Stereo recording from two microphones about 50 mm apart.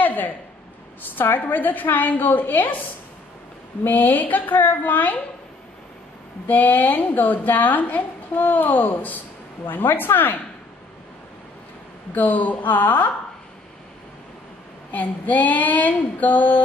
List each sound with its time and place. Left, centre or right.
0.0 s a sound: left
1.1 s a woman's voice: left
3.8 s a woman's voice: left
6.4 s a woman's voice: left
12.1 s a woman's voice: left
14.9 s a woman's voice: left